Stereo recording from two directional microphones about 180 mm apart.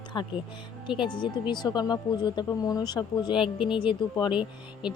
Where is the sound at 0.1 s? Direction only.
25° left (ahead or behind).